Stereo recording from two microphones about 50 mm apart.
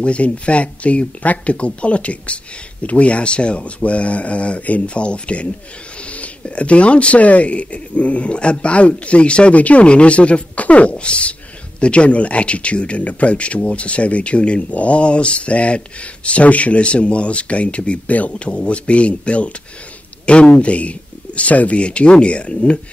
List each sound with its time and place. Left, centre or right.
0.0 s speech: left